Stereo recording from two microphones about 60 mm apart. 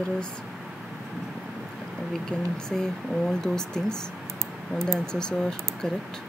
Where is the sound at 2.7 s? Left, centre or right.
Centre.